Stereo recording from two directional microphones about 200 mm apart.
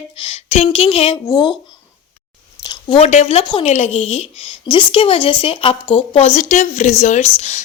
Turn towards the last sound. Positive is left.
turn(degrees=35)  # may be behind; listen again after turning